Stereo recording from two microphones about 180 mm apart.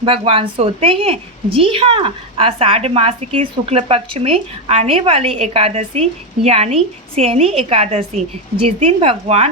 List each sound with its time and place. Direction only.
0.0 s a woman's voice: 30° right (ahead or behind)